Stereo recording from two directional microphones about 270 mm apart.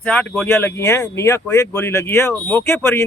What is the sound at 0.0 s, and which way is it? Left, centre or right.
Speech, centre.